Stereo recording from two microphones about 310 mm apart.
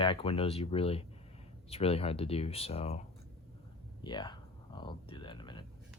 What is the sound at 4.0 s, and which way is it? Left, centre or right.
Speech, centre.